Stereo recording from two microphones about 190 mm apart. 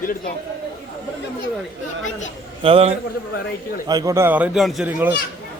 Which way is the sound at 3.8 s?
20° right (ahead or behind).